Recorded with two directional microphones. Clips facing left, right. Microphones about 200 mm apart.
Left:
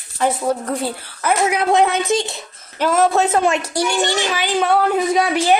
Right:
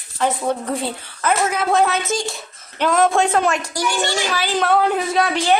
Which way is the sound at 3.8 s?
20° left (ahead or behind).